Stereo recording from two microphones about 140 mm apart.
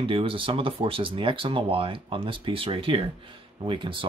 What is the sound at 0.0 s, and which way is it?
Speech, 40° right (ahead or behind).